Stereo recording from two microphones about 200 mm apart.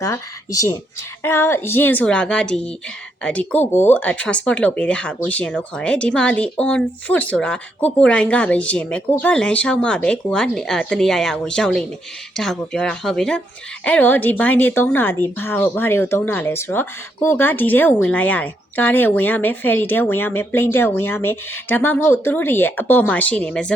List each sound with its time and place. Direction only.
0.0 s speech: 15° left (ahead or behind)